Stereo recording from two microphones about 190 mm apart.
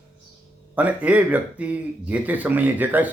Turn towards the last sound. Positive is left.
turn(degrees=-10)  # may be behind; listen again after turning